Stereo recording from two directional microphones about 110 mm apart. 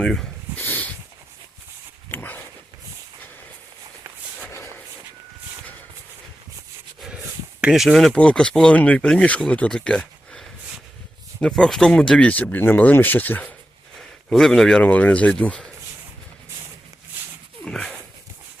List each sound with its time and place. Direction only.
0.0 s speech: 5° left (ahead or behind)
0.5 s dog: 20° left (ahead or behind)
2.0 s dog: 20° left (ahead or behind)
7.6 s speech: 5° right (ahead or behind); by 13.5 s 15° left (ahead or behind)
14.3 s speech: 5° left (ahead or behind)
17.7 s dog: 5° left (ahead or behind)